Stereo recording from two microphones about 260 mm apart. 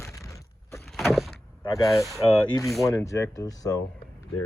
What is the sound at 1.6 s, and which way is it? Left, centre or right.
Speech, centre.